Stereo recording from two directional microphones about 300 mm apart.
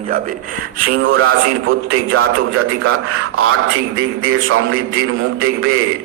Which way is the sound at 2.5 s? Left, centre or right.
Right.